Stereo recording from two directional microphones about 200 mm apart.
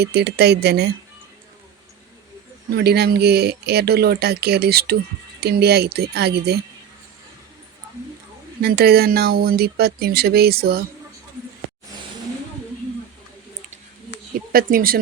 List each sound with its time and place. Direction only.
0.0 s speech: 55° right (ahead or behind)
2.6 s speech: 50° right (ahead or behind)
8.6 s speech: 50° right (ahead or behind)
14.5 s speech: 45° right (ahead or behind)